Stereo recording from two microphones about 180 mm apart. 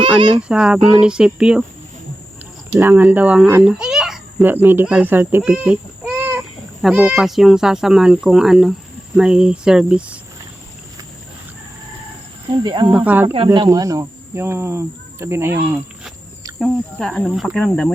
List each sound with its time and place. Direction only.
0.0 s speech: 30° right (ahead or behind)
0.4 s speech: 5° right (ahead or behind)
2.7 s a child's voice: 10° right (ahead or behind)
5.4 s a sound: 5° right (ahead or behind)
6.8 s speech: 5° right (ahead or behind)
12.5 s speech: 25° right (ahead or behind)
12.9 s a child's voice: 10° right (ahead or behind)
13.3 s a child's voice: 30° right (ahead or behind)
16.6 s speech: centre (ahead or behind)